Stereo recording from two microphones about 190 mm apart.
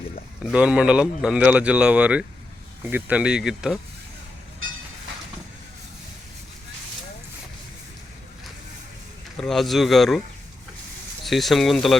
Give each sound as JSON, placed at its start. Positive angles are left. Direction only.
{"t": 0.4, "sound": "speech", "side_deg": -5}
{"t": 9.4, "sound": "speech", "side_deg": 0}
{"t": 11.3, "sound": "speech", "side_deg": 0}